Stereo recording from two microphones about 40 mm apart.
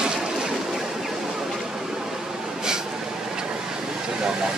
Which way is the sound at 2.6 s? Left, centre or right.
Centre.